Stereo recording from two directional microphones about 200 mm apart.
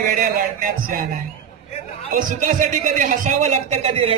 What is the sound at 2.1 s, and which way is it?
A man's voice, 40° right (ahead or behind).